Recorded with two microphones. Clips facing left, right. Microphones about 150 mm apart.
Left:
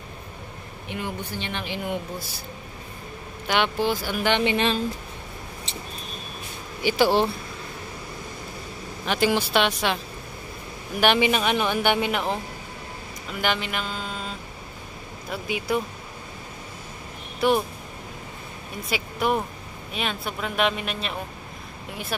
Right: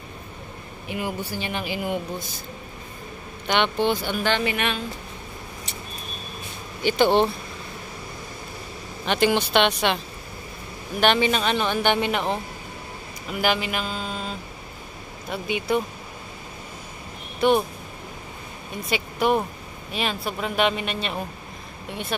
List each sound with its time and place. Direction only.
0.8 s speech: 5° right (ahead or behind)
3.4 s speech: 5° left (ahead or behind)
4.2 s speech: 15° left (ahead or behind)
4.5 s speech: 30° left (ahead or behind)
6.8 s speech: 5° left (ahead or behind)
9.0 s speech: 5° left (ahead or behind)
11.0 s speech: 10° left (ahead or behind)
17.4 s speech: centre (ahead or behind)
18.9 s speech: centre (ahead or behind)